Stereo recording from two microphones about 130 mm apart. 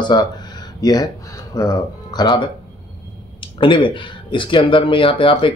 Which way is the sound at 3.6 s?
40° left (ahead or behind).